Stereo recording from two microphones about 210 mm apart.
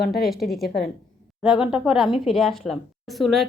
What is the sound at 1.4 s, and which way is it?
A woman's voice, 5° right (ahead or behind).